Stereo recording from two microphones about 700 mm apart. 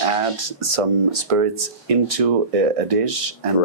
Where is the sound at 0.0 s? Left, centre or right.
Right.